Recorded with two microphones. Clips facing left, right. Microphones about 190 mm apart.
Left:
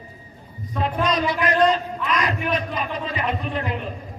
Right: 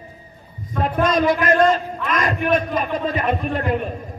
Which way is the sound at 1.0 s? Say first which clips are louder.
Right 6 dB; 45° right (ahead or behind).